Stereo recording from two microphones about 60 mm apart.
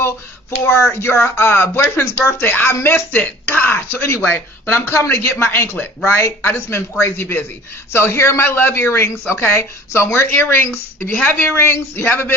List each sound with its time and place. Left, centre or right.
0.7 s speech: left
3.2 s a sound: left
3.9 s a man's voice: left